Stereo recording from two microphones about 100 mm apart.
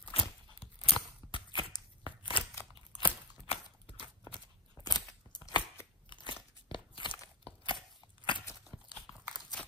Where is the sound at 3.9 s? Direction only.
50° left (ahead or behind).